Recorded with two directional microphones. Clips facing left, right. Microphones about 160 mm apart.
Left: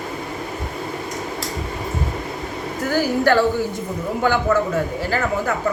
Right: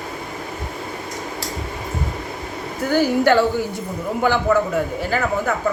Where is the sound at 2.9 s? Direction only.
20° right (ahead or behind).